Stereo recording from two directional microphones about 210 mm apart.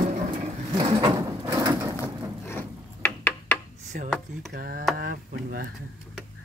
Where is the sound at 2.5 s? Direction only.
10° left (ahead or behind).